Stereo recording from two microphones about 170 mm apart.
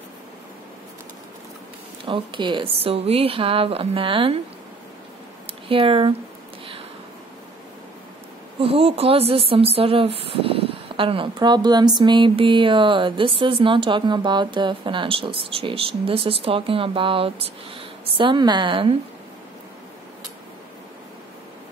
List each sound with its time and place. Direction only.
2.0 s speech: 30° right (ahead or behind)
5.7 s speech: 30° right (ahead or behind)
8.5 s speech: 35° right (ahead or behind)